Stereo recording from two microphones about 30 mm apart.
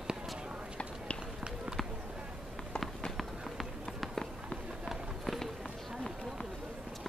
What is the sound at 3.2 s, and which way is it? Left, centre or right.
Run, centre.